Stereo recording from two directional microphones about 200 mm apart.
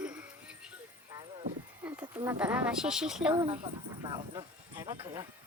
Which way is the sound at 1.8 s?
10° right (ahead or behind).